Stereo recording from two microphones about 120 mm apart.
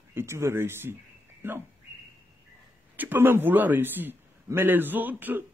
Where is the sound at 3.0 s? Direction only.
15° right (ahead or behind).